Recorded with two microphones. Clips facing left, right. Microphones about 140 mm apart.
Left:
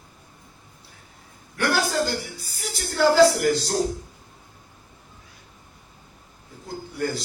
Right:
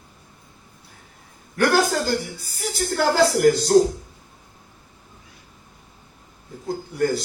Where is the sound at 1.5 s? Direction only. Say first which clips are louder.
Right 4 dB; 45° right (ahead or behind).